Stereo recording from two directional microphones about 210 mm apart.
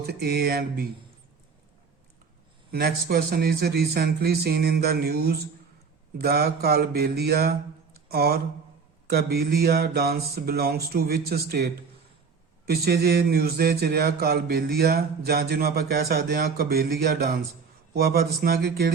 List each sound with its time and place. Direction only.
0.0 s speech: 50° right (ahead or behind)
2.7 s speech: 45° right (ahead or behind)